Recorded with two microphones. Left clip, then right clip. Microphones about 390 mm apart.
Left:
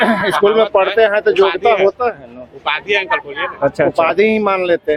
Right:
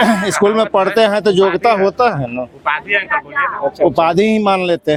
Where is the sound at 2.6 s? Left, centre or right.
Right.